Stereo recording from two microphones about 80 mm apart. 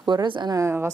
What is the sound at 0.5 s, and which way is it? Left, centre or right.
Speech, right.